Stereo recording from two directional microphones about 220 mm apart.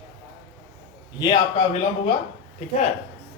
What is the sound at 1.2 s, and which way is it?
Speech, 20° left (ahead or behind).